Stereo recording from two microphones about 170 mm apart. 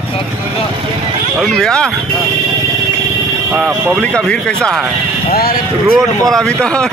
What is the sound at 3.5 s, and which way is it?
Speech, centre (ahead or behind).